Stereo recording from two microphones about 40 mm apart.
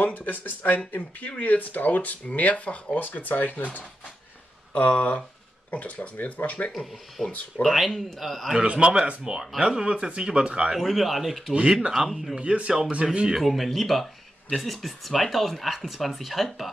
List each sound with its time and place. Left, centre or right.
0.0 s speech: left
4.7 s speech: left
7.2 s speech: centre
7.7 s speech: centre
8.5 s speech: right
10.8 s speech: centre
12.4 s speech: right
13.4 s speech: centre